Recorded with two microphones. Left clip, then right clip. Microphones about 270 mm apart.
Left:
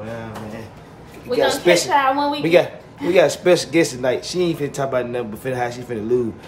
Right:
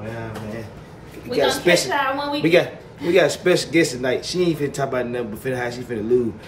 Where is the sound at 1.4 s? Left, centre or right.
Centre.